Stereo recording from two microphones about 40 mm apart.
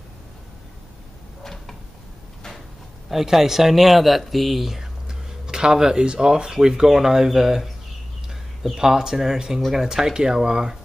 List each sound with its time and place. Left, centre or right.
1.4 s a sound: centre
3.1 s speech: centre
5.0 s speech: centre